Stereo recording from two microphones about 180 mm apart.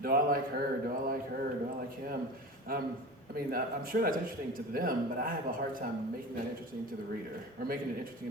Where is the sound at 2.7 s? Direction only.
55° right (ahead or behind).